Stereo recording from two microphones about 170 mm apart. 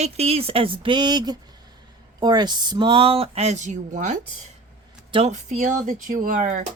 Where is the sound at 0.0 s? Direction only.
35° right (ahead or behind).